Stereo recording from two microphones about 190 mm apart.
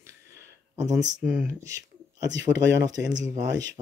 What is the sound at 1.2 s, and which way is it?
Speech, 5° right (ahead or behind).